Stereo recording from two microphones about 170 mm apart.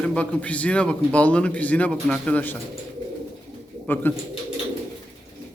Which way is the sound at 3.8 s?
10° left (ahead or behind).